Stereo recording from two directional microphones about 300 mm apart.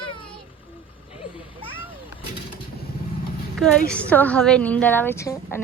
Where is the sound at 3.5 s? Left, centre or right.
Centre.